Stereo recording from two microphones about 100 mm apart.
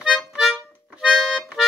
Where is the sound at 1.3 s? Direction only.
5° right (ahead or behind).